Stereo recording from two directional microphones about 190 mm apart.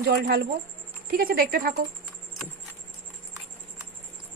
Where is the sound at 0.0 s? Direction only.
55° right (ahead or behind).